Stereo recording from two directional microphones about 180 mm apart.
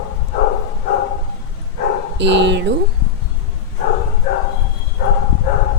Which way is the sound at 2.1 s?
75° right (ahead or behind).